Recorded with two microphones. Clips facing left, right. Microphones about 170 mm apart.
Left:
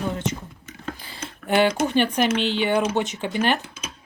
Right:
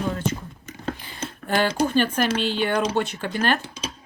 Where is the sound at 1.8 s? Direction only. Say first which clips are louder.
Left 1 dB; 15° left (ahead or behind).